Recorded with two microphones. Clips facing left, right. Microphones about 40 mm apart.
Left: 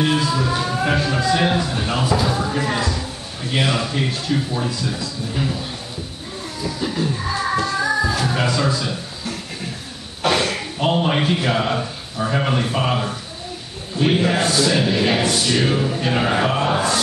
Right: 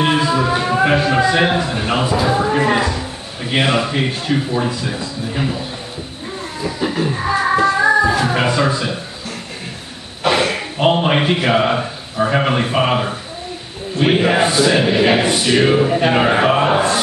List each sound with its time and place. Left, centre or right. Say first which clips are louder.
0.0 s speech: right 4 dB; right
6.6 s music: right 4 dB; right
10.2 s a sound: right 3 dB; centre
10.8 s a man's voice: right 4 dB; right